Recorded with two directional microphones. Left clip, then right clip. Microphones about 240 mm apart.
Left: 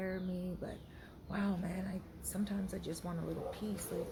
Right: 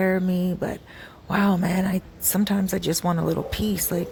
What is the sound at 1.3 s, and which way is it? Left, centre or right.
Speech, right.